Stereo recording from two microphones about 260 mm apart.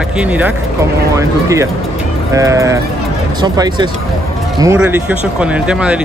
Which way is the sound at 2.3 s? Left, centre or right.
Centre.